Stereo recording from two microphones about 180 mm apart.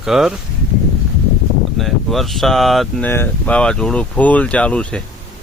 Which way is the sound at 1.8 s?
Centre (ahead or behind).